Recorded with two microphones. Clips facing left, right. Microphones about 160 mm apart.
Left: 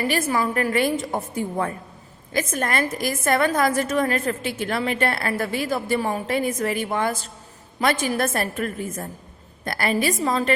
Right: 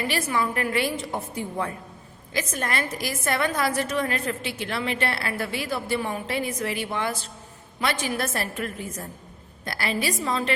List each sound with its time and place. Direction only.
0.1 s a woman's voice: 45° left (ahead or behind)